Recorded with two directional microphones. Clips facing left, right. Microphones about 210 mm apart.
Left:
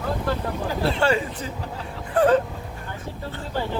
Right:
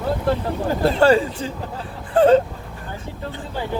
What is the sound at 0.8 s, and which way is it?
Speech, 40° right (ahead or behind).